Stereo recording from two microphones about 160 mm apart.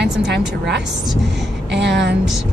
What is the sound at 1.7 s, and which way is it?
Speech, 90° right.